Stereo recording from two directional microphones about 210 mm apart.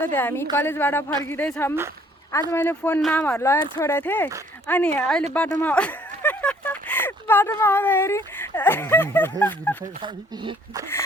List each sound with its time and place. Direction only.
0.0 s speech: 10° left (ahead or behind)
10.0 s speech: 25° right (ahead or behind)